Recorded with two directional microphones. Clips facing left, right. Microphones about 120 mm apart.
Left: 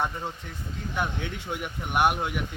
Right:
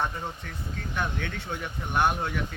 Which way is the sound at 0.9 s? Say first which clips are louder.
Left 1 dB; 15° left (ahead or behind).